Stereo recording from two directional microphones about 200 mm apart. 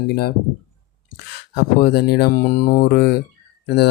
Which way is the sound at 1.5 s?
50° left (ahead or behind).